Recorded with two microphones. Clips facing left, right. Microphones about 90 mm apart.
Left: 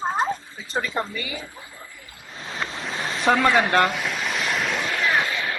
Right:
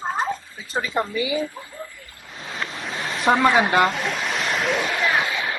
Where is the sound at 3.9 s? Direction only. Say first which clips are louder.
Right 1 dB; centre (ahead or behind).